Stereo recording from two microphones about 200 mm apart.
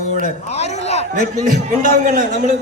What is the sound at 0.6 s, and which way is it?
Speech, 35° left (ahead or behind).